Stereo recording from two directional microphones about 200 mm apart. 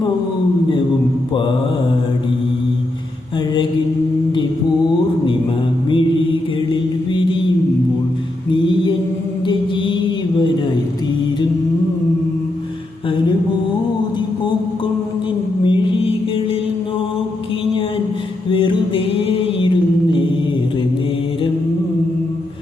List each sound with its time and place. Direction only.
15.6 s music: 25° left (ahead or behind)
18.5 s mantra: 25° left (ahead or behind)